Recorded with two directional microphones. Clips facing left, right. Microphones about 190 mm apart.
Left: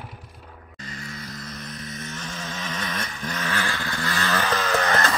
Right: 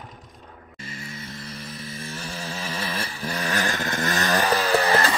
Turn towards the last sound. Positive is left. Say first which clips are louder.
# right 2 dB
turn(degrees=-30)  # may be behind; listen again after turning